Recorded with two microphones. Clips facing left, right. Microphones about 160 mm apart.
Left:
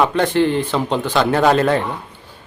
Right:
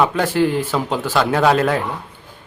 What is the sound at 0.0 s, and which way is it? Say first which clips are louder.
Speech: left 1 dB; 5° right (ahead or behind).